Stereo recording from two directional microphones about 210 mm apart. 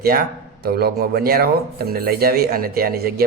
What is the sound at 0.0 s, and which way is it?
Speech, 45° right (ahead or behind).